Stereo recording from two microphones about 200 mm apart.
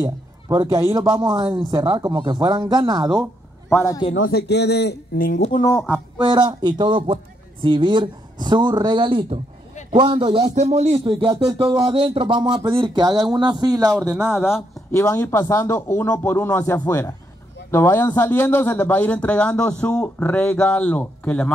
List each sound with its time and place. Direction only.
0.0 s speech: 20° right (ahead or behind)
3.7 s speech: 15° left (ahead or behind)
4.2 s speech: 55° left (ahead or behind)
5.4 s speech: 25° left (ahead or behind)
6.1 s speech: 20° right (ahead or behind)
14.1 s speech: 5° right (ahead or behind)
14.9 s speech: 15° left (ahead or behind)